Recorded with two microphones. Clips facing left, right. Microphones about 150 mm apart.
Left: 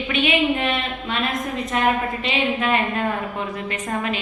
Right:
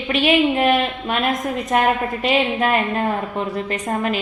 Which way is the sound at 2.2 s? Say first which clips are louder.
Right 4 dB; 45° right (ahead or behind).